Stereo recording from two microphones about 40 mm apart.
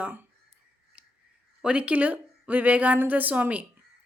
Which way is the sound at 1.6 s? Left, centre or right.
Right.